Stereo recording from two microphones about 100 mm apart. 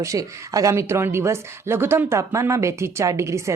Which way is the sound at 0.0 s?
35° right (ahead or behind).